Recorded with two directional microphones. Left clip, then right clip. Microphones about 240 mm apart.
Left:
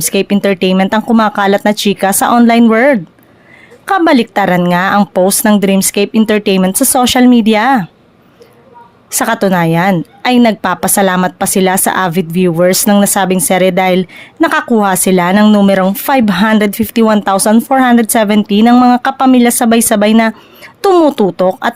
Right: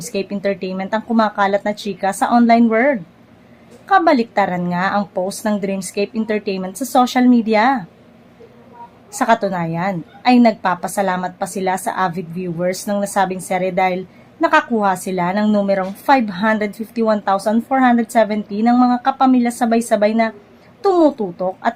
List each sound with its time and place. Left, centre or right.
0.0 s speech: left
9.1 s speech: left